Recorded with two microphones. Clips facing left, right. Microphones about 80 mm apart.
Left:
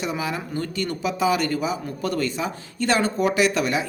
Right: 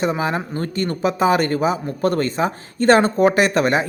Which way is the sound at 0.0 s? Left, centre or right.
Right.